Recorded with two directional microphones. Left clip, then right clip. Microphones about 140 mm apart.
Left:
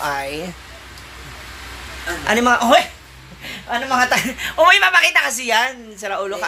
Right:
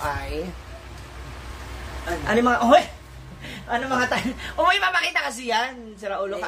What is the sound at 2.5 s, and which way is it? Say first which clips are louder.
Speech: left 2 dB; 15° left (ahead or behind).